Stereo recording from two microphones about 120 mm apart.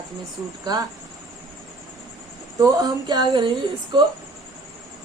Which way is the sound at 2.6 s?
30° right (ahead or behind).